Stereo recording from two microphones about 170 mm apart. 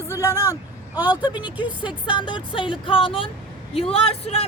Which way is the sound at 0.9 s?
10° right (ahead or behind).